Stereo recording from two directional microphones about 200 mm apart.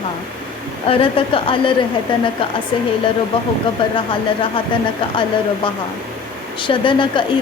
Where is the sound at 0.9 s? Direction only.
25° left (ahead or behind).